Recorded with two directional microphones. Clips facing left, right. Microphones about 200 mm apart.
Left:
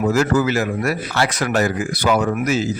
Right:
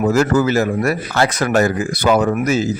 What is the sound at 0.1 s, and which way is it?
Speech, 45° right (ahead or behind).